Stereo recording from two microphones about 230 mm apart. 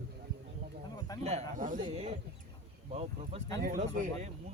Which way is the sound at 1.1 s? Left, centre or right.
Centre.